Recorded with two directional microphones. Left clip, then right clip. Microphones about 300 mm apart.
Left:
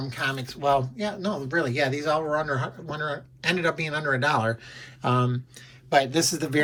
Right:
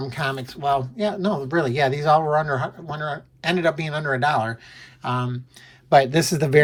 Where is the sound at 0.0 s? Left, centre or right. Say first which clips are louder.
Right 2 dB; centre.